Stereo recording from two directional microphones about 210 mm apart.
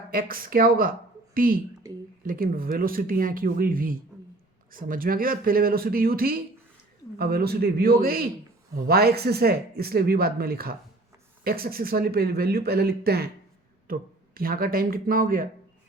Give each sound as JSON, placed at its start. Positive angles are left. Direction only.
{"t": 0.1, "sound": "a woman's voice", "side_deg": -45}
{"t": 1.8, "sound": "speech", "side_deg": -15}
{"t": 2.2, "sound": "speech", "side_deg": -40}